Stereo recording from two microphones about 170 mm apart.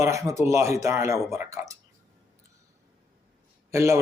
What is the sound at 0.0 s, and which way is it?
A man's voice, 20° right (ahead or behind).